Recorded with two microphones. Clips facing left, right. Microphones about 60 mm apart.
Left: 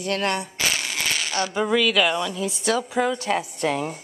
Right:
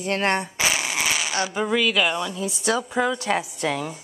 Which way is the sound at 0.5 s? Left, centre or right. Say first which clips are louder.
Right 2 dB; centre.